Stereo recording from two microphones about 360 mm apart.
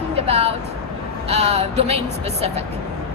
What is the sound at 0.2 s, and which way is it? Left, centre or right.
Music, centre.